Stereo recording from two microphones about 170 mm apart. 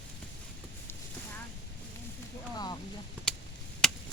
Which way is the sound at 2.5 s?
25° left (ahead or behind).